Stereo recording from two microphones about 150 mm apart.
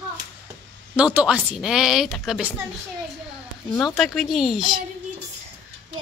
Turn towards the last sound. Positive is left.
turn(degrees=0)  # may be behind; listen again after turning